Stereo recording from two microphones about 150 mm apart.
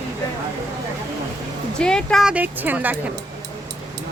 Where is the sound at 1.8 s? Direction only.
5° left (ahead or behind); by 2.9 s 10° right (ahead or behind).